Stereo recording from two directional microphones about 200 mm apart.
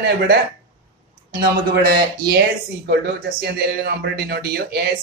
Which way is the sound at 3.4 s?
55° right (ahead or behind).